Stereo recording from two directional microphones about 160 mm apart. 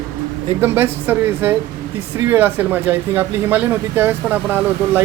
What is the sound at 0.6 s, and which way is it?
Speech, 15° right (ahead or behind).